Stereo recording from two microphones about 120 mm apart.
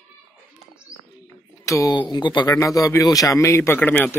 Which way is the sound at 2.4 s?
25° left (ahead or behind).